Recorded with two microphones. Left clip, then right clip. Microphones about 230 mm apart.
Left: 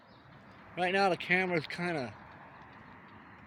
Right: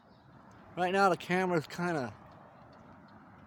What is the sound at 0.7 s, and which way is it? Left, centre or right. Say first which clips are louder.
Speech: right 1 dB; centre.